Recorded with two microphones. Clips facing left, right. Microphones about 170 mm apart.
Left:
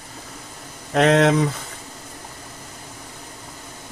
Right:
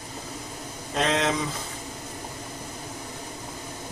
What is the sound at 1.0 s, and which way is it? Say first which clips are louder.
Speech: left 9 dB; 65° left (ahead or behind).